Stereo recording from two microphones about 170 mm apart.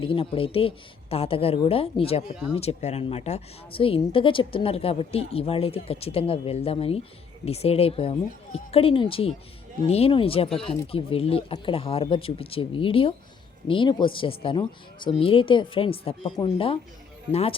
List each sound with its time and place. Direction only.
0.0 s a woman's voice: 30° left (ahead or behind)
10.5 s speech: 5° left (ahead or behind)
10.9 s a woman's voice: 35° left (ahead or behind)